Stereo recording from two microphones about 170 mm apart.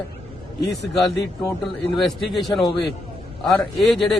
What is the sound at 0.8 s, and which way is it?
Speech, 80° left.